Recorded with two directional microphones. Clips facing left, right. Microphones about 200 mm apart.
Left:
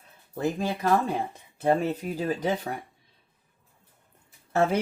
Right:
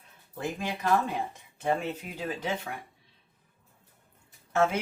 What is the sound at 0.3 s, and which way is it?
Speech, 35° left (ahead or behind).